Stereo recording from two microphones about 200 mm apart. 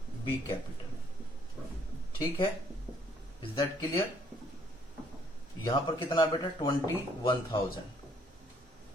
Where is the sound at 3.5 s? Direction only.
25° left (ahead or behind).